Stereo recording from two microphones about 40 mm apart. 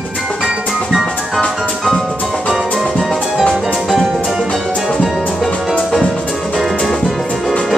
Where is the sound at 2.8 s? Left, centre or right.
Centre.